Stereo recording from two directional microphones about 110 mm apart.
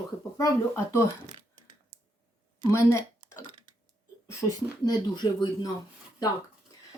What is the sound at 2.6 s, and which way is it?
Speech, 25° left (ahead or behind).